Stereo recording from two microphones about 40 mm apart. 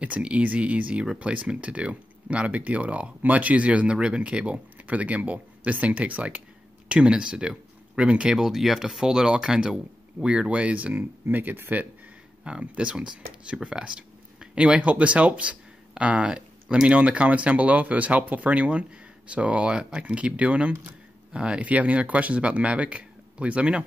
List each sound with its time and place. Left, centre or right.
0.0 s speech: right
6.9 s speech: right
8.3 s speech: centre
10.5 s speech: right
11.0 s speech: right
12.4 s speech: right